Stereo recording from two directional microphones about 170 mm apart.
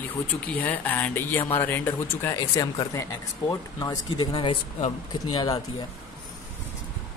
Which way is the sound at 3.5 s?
25° left (ahead or behind).